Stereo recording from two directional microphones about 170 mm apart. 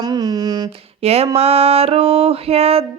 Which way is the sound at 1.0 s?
35° right (ahead or behind).